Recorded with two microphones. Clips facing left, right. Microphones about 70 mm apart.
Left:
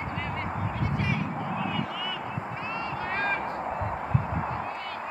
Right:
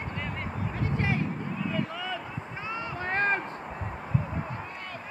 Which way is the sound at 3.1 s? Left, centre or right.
Right.